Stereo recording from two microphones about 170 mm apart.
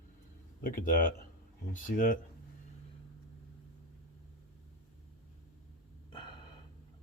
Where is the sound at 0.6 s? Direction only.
55° left (ahead or behind).